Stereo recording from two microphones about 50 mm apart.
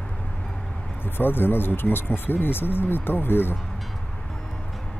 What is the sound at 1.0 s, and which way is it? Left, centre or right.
Speech, left.